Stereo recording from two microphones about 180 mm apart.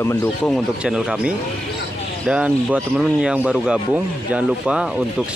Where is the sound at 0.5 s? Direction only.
5° right (ahead or behind).